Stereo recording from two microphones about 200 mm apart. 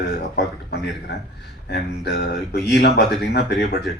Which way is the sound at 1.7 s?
55° left (ahead or behind).